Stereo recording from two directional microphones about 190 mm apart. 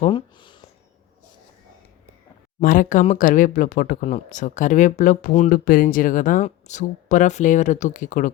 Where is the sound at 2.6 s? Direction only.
45° left (ahead or behind).